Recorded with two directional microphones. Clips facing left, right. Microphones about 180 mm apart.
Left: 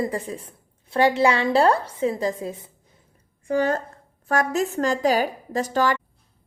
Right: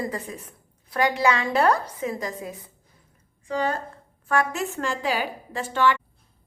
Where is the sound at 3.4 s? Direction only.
50° left (ahead or behind).